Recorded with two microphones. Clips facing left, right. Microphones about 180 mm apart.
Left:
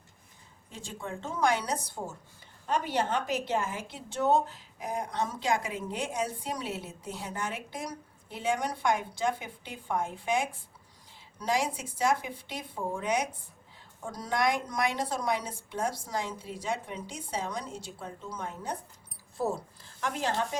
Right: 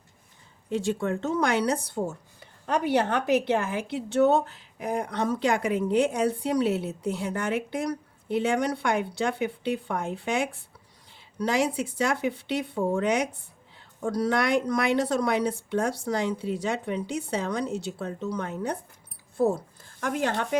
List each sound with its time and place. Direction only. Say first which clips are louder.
0.7 s a woman's voice: right 13 dB; 70° right (ahead or behind)
19.4 s speech: right 7 dB; 50° right (ahead or behind)